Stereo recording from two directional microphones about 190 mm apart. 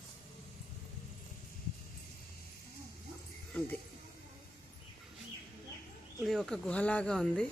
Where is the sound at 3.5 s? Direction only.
10° left (ahead or behind).